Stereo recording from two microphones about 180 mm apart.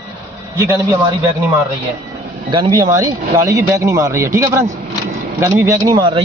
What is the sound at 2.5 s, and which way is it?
Speech, 25° right (ahead or behind).